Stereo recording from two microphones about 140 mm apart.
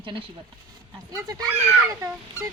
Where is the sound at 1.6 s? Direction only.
15° right (ahead or behind).